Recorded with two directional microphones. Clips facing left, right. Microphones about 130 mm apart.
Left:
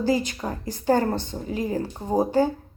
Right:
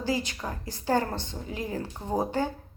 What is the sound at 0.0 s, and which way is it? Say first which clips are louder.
Speech: left 6 dB; 50° left (ahead or behind).